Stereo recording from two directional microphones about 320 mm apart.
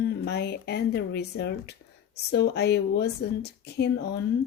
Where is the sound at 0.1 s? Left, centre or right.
Left.